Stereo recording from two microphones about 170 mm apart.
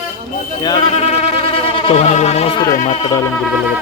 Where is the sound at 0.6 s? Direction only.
25° left (ahead or behind).